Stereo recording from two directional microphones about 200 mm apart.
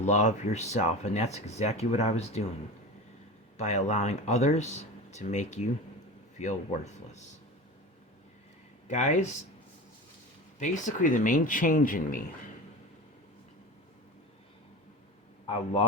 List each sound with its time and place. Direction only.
0.0 s speech: 35° left (ahead or behind)
3.6 s speech: 35° left (ahead or behind)
8.9 s speech: 35° left (ahead or behind)
10.6 s speech: 40° left (ahead or behind)